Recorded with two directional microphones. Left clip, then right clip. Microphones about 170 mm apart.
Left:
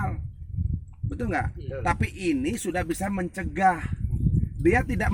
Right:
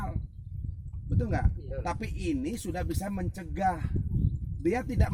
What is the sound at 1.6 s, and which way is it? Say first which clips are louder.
Speech: left 4 dB; 50° left (ahead or behind).